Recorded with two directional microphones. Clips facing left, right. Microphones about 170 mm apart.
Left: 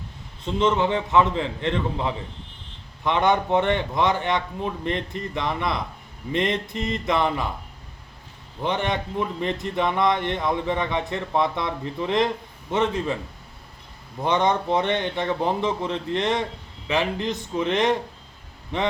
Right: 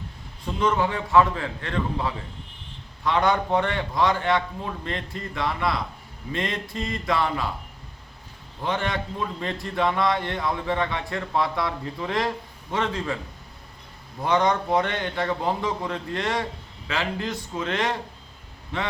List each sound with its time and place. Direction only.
0.4 s speech: 25° left (ahead or behind)
8.6 s speech: 20° left (ahead or behind)
14.3 s speech: 20° left (ahead or behind)